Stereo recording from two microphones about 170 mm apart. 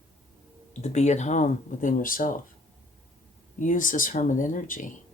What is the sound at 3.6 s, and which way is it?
Speech, 50° left (ahead or behind).